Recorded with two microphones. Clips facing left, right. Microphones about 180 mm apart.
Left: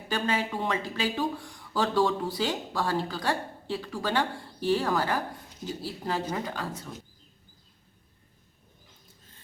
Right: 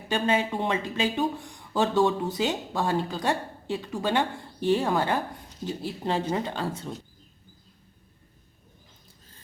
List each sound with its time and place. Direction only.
0.1 s speech: 25° right (ahead or behind)